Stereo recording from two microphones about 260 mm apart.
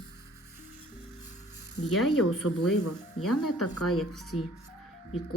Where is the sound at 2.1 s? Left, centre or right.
Left.